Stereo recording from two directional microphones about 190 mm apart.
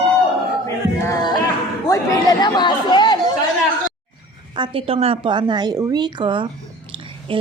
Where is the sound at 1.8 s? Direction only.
15° left (ahead or behind).